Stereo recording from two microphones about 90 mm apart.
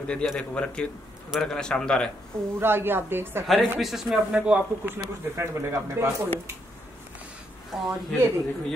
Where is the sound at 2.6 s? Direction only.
25° right (ahead or behind).